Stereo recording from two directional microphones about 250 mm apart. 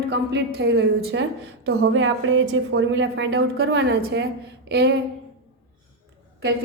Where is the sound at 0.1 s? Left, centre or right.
Right.